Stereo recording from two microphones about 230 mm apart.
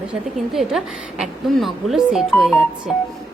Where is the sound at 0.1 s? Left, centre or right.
Centre.